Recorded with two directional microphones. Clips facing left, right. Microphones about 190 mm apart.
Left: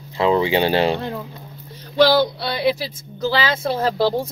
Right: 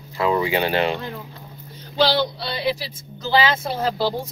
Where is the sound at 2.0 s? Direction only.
60° left (ahead or behind).